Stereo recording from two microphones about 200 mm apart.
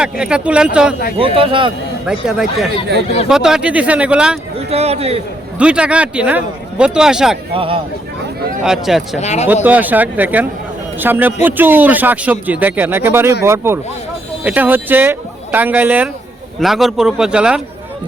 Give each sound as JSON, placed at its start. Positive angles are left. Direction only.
{"t": 0.0, "sound": "speech", "side_deg": -5}
{"t": 1.2, "sound": "speech", "side_deg": -25}
{"t": 2.0, "sound": "speech", "side_deg": -5}
{"t": 4.5, "sound": "speech", "side_deg": -30}
{"t": 5.5, "sound": "speech", "side_deg": -5}
{"t": 7.5, "sound": "speech", "side_deg": -25}
{"t": 8.6, "sound": "speech", "side_deg": 0}
{"t": 9.1, "sound": "speech", "side_deg": 35}
{"t": 9.6, "sound": "speech", "side_deg": -10}